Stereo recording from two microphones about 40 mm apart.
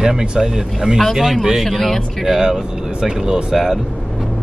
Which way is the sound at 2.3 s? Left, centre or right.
Centre.